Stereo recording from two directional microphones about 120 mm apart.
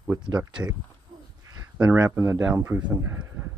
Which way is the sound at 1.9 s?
25° right (ahead or behind).